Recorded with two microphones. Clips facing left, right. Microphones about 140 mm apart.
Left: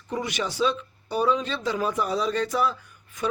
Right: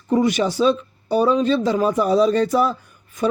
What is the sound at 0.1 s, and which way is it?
Speech, 40° right (ahead or behind).